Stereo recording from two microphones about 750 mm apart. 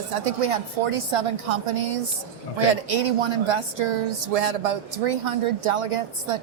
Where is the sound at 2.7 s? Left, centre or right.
Right.